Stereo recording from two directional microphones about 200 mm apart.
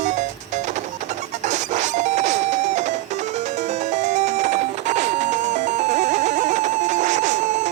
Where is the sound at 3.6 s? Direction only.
35° right (ahead or behind).